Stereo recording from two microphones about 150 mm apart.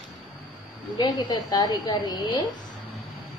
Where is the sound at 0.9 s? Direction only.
25° left (ahead or behind).